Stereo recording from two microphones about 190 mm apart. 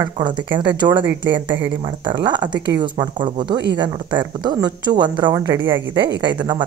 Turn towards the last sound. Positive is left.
turn(degrees=-20)  # may be behind; listen again after turning